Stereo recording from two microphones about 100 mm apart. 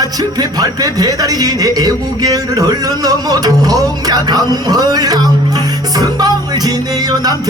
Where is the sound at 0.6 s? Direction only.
40° right (ahead or behind).